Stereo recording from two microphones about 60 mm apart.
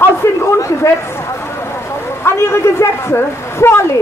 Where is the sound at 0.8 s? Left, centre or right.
Left.